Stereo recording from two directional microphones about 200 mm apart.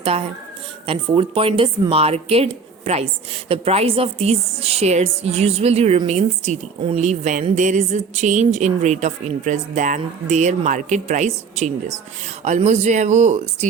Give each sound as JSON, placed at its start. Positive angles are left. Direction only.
{"t": 0.9, "sound": "a woman's voice", "side_deg": -25}